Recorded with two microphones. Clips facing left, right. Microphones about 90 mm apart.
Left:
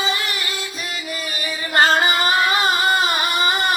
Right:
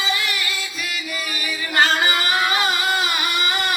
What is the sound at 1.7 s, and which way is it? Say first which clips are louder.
Singing: left 3 dB; 40° left (ahead or behind).